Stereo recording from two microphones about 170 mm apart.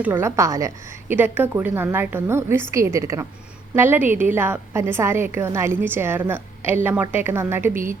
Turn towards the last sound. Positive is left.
turn(degrees=-15)  # may be behind; listen again after turning